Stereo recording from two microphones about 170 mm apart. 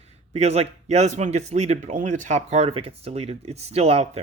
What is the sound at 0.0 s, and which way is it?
A man's voice, 40° right (ahead or behind).